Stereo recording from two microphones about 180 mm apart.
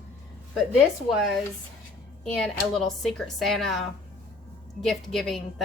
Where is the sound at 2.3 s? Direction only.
Centre (ahead or behind).